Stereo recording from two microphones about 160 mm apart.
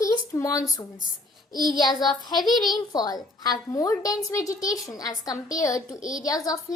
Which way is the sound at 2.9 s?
25° left (ahead or behind).